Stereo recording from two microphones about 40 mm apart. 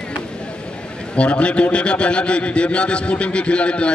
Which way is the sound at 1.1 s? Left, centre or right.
Left.